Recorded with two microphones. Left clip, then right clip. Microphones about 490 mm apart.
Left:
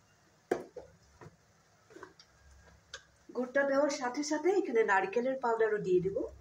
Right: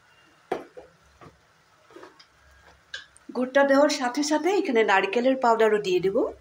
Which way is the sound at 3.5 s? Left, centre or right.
Left.